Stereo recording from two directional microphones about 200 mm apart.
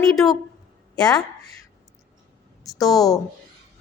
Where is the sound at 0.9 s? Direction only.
5° left (ahead or behind).